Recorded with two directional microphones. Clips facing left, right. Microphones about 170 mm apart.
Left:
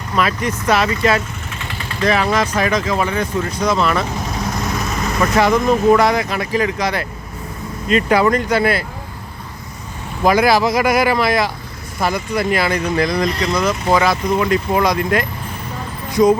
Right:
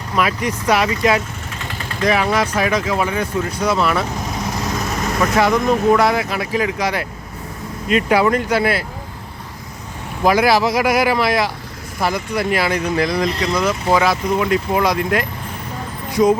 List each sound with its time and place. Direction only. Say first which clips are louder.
0.2 s speech: even; 10° right (ahead or behind)
1.6 s vehicle: even; 45° right (ahead or behind)
2.0 s speech: left 1 dB; 10° right (ahead or behind)
5.2 s speech: left 1 dB; centre (ahead or behind)
10.2 s speech: left 1 dB; 5° right (ahead or behind)